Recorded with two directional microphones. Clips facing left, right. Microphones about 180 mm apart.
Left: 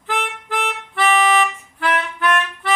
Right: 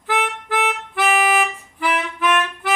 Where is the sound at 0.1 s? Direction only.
5° right (ahead or behind).